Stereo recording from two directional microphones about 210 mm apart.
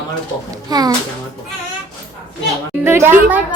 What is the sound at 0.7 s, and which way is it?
Speech, 20° right (ahead or behind).